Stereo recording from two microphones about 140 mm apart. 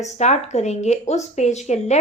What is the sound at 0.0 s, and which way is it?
A woman's voice, 55° left (ahead or behind).